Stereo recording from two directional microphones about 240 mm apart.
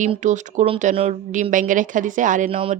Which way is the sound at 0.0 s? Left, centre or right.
Right.